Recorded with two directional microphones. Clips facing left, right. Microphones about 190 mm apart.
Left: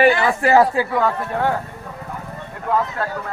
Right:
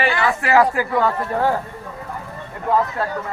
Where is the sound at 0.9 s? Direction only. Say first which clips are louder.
Right 1 dB; centre (ahead or behind).